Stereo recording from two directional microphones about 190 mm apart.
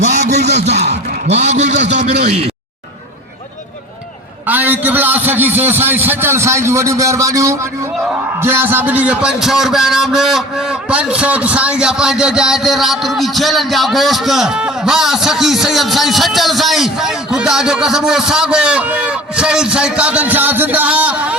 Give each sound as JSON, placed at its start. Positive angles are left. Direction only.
{"t": 0.0, "sound": "a man's voice", "side_deg": -40}
{"t": 4.4, "sound": "a man's voice", "side_deg": -10}